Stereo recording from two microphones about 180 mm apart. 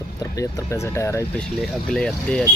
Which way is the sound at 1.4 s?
5° left (ahead or behind).